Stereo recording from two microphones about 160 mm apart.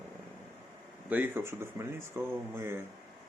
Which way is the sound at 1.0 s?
10° right (ahead or behind).